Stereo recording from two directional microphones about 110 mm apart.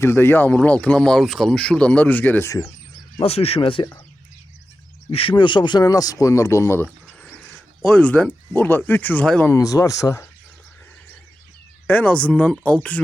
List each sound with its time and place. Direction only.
0.0 s speech: 20° left (ahead or behind)
3.2 s speech: 65° left (ahead or behind)
5.3 s speech: 45° left (ahead or behind); by 9.5 s 10° left (ahead or behind)
9.5 s speech: 30° left (ahead or behind)
11.9 s speech: 10° left (ahead or behind)